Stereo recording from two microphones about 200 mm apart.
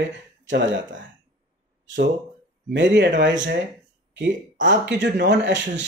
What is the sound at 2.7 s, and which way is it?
Speech, 65° right (ahead or behind).